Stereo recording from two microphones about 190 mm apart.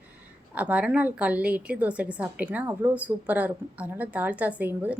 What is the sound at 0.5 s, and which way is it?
A woman's voice, 5° right (ahead or behind).